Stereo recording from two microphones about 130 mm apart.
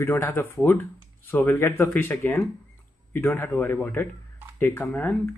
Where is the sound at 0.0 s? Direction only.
20° left (ahead or behind).